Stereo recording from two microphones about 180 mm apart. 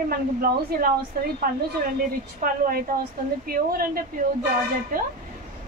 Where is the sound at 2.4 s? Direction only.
55° right (ahead or behind).